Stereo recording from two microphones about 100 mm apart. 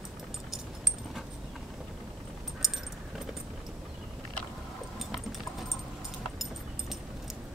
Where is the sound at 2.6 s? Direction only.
5° right (ahead or behind).